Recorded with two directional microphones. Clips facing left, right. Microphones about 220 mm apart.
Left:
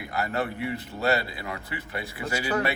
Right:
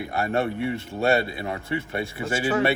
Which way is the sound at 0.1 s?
25° right (ahead or behind).